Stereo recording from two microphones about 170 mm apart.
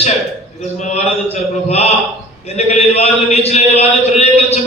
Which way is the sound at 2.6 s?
40° left (ahead or behind).